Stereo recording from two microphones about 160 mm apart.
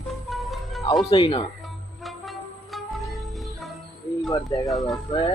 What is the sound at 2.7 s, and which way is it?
Music, centre (ahead or behind).